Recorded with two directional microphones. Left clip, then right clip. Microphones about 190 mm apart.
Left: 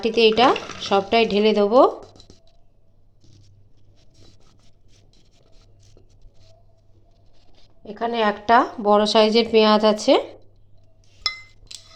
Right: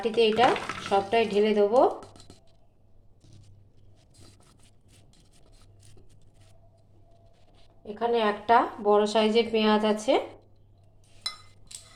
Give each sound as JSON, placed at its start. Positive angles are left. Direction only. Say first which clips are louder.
{"t": 0.2, "sound": "speech", "louder": "left 6 dB", "side_deg": 50}
{"t": 7.9, "sound": "speech", "louder": "left 4 dB", "side_deg": 55}